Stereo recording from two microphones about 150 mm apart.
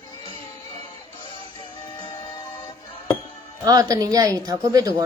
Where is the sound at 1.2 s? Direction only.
35° left (ahead or behind).